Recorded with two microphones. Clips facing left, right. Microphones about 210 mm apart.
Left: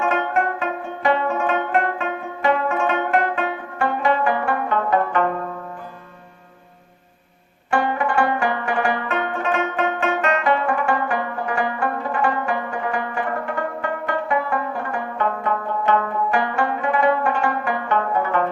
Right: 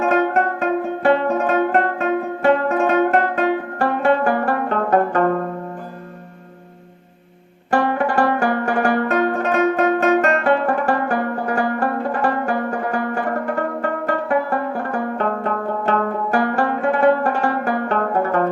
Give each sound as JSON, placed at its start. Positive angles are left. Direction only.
{"t": 0.0, "sound": "music", "side_deg": -40}
{"t": 8.2, "sound": "music", "side_deg": -40}